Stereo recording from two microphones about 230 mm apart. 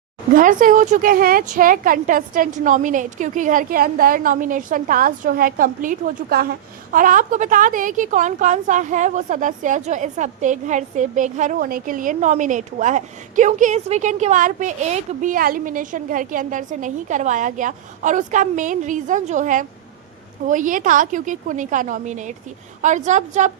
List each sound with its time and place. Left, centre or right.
0.3 s a woman's voice: right